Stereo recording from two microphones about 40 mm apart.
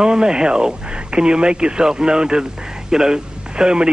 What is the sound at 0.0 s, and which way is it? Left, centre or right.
Speech, centre.